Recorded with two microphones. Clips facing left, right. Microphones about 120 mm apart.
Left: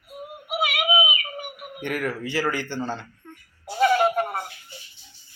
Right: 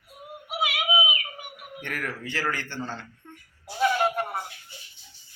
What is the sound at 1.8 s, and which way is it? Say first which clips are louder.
A man's voice: left 7 dB; 15° left (ahead or behind).